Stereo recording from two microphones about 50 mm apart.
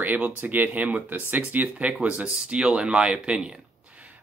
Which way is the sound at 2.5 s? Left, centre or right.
Centre.